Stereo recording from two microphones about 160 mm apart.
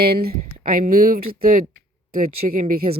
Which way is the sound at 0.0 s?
75° right (ahead or behind).